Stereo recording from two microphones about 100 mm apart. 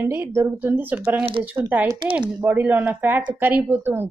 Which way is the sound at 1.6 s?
30° right (ahead or behind).